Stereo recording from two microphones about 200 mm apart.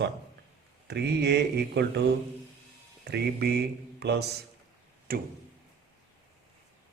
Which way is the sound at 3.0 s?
55° right (ahead or behind).